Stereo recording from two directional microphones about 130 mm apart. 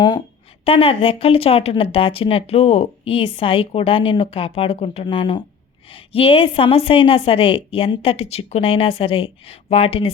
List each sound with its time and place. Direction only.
0.6 s a woman's voice: 45° left (ahead or behind)
5.0 s a woman's voice: 40° left (ahead or behind)